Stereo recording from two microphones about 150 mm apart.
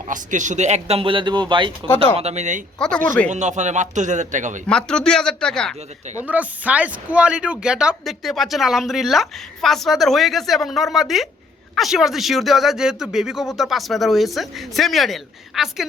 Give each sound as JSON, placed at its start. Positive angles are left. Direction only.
{"t": 0.1, "sound": "speech", "side_deg": -55}
{"t": 2.1, "sound": "speech", "side_deg": -45}
{"t": 2.7, "sound": "speech", "side_deg": 5}
{"t": 3.2, "sound": "speech", "side_deg": -50}
{"t": 4.6, "sound": "speech", "side_deg": 5}
{"t": 6.2, "sound": "speech", "side_deg": -10}